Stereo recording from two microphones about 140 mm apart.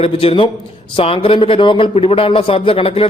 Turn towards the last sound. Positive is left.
turn(degrees=45)  # may be behind; listen again after turning